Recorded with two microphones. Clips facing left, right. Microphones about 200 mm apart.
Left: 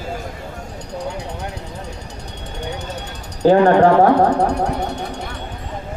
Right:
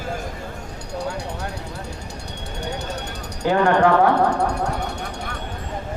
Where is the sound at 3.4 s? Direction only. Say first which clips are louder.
Left 6 dB; 35° left (ahead or behind).